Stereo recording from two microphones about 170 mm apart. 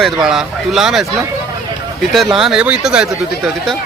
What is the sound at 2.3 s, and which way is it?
Speech, 5° right (ahead or behind).